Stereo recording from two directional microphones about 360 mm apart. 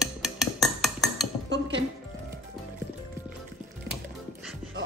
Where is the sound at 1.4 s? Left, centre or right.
Right.